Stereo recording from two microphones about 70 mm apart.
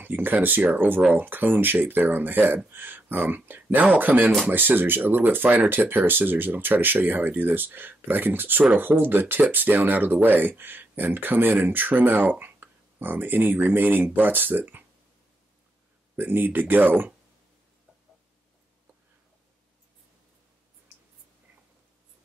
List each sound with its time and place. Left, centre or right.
0.0 s speech: right
16.2 s speech: right